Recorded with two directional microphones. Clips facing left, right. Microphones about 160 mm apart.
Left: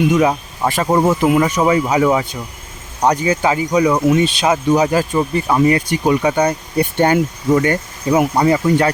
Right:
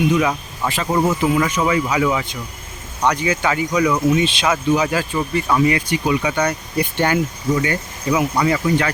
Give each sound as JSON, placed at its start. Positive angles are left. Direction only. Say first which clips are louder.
{"t": 0.1, "sound": "speech", "louder": "left 4 dB", "side_deg": 40}
{"t": 1.4, "sound": "speech", "louder": "left 4 dB", "side_deg": 35}
{"t": 6.4, "sound": "speech", "louder": "left 4 dB", "side_deg": 30}
{"t": 7.5, "sound": "speech", "louder": "left 6 dB", "side_deg": 45}